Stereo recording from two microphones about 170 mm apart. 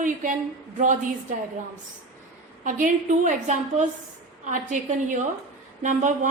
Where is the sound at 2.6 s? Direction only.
50° right (ahead or behind).